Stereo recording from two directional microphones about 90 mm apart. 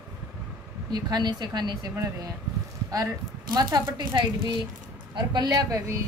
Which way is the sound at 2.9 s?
45° right (ahead or behind).